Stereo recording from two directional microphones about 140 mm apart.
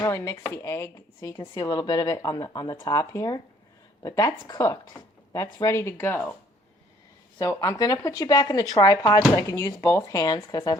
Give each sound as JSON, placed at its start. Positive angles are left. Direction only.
{"t": 0.0, "sound": "speech", "side_deg": 20}
{"t": 7.3, "sound": "speech", "side_deg": 25}